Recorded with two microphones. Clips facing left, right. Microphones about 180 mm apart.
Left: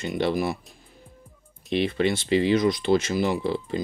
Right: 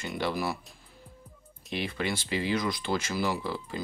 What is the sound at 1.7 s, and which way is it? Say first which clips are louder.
Speech: left 9 dB; 25° left (ahead or behind).